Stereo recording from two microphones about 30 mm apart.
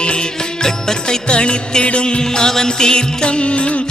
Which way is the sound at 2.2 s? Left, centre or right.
Left.